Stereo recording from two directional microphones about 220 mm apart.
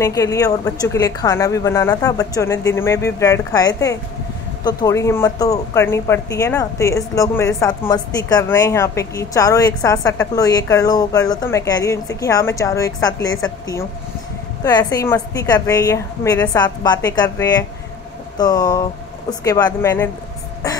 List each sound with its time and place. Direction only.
0.0 s speech: 15° left (ahead or behind)